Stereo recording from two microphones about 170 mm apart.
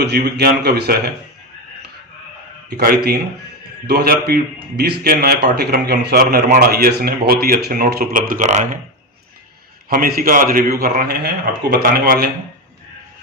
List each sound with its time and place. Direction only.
0.0 s a man's voice: 70° right (ahead or behind)
2.6 s a man's voice: 70° right (ahead or behind); by 8.8 s 45° right (ahead or behind)
9.9 s a man's voice: 60° right (ahead or behind)